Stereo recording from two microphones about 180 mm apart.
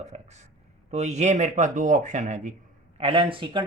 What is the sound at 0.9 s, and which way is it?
Speech, 40° right (ahead or behind).